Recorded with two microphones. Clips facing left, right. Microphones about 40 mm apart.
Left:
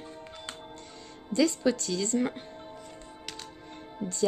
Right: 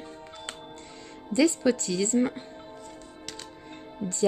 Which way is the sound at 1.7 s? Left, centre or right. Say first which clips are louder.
Right 2 dB; right.